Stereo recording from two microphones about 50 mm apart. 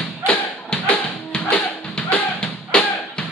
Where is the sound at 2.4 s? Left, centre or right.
Left.